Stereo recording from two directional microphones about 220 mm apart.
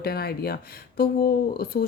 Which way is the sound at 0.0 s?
45° left (ahead or behind).